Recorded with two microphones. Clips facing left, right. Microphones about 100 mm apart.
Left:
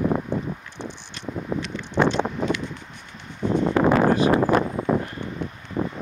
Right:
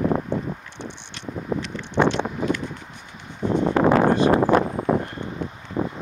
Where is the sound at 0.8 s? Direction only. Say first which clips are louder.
Left 3 dB; 40° left (ahead or behind).